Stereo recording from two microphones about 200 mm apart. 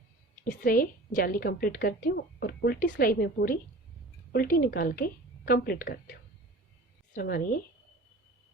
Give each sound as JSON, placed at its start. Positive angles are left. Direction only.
{"t": 0.4, "sound": "a woman's voice", "side_deg": 45}
{"t": 7.1, "sound": "a woman's voice", "side_deg": 45}